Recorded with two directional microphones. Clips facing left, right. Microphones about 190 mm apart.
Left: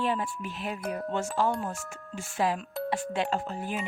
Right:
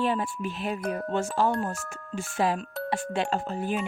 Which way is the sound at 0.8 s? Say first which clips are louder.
Right 2 dB; 5° left (ahead or behind).